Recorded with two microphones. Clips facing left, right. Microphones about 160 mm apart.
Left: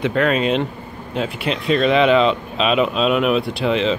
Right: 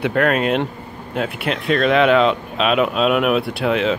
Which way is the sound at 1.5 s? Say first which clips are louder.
Even; centre (ahead or behind).